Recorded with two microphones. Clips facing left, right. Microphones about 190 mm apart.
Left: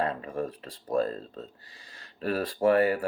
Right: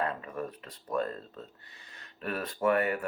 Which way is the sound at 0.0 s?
30° left (ahead or behind).